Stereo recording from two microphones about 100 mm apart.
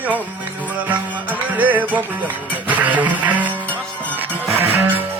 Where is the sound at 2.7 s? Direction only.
15° right (ahead or behind).